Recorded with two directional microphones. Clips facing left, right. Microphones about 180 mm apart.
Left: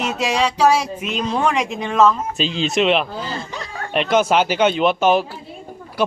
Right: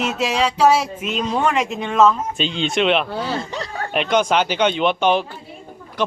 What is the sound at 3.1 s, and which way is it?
Speech, 70° right (ahead or behind).